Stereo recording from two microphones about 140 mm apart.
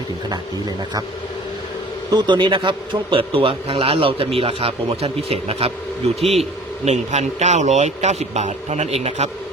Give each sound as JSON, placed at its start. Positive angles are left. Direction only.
{"t": 2.0, "sound": "a man's voice", "side_deg": -30}
{"t": 6.2, "sound": "a man's voice", "side_deg": 0}
{"t": 6.8, "sound": "a man's voice", "side_deg": -50}